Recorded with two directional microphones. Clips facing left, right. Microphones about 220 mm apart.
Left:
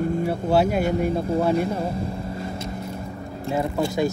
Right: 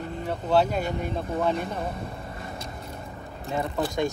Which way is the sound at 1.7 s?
30° left (ahead or behind).